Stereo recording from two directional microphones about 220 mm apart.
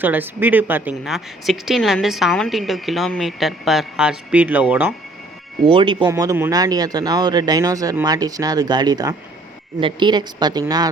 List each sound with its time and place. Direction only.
0.0 s speech: 10° right (ahead or behind)
5.6 s a woman's voice: 20° right (ahead or behind)